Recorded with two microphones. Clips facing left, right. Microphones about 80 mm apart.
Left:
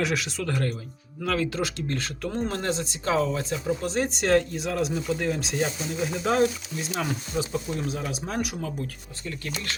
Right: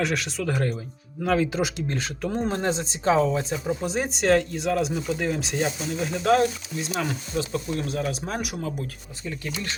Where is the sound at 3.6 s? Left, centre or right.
Centre.